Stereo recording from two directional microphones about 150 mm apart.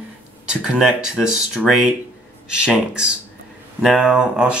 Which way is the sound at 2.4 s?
5° right (ahead or behind).